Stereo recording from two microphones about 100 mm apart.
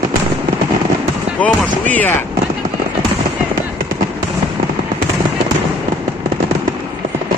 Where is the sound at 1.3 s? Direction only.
15° left (ahead or behind).